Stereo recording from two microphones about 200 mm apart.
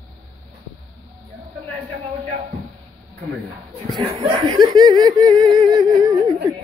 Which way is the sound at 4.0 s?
20° right (ahead or behind).